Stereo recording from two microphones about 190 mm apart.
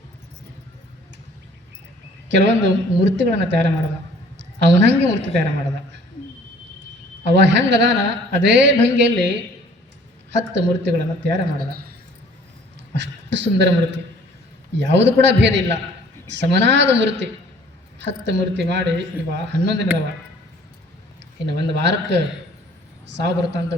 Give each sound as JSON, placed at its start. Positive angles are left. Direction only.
{"t": 2.3, "sound": "a man's voice", "side_deg": -70}
{"t": 7.3, "sound": "a man's voice", "side_deg": -65}
{"t": 12.9, "sound": "a man's voice", "side_deg": -70}
{"t": 21.4, "sound": "a man's voice", "side_deg": -65}